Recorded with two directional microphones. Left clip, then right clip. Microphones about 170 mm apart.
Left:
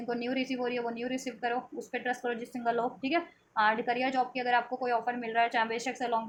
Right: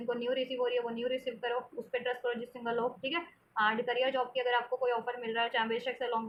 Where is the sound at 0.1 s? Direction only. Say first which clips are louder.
Even; 50° left (ahead or behind).